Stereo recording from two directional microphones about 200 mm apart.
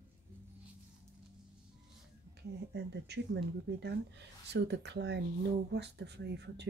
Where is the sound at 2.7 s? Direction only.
55° right (ahead or behind).